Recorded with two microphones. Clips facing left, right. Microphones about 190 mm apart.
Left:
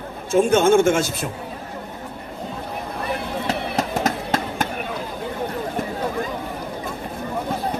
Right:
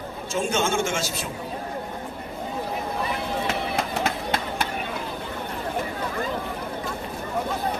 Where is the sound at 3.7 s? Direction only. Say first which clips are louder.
Left 4 dB; 45° left (ahead or behind).